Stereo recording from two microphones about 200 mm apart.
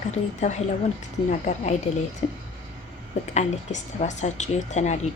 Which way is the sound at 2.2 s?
35° left (ahead or behind).